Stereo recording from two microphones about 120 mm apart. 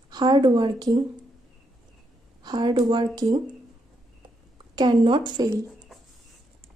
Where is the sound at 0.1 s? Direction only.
35° right (ahead or behind).